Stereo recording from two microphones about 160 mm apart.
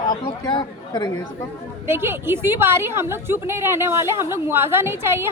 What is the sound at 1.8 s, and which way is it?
A woman's voice, 15° right (ahead or behind).